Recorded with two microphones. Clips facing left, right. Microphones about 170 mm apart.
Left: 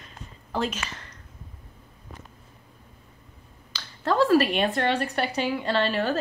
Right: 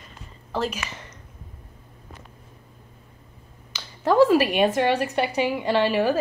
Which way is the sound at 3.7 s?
15° right (ahead or behind).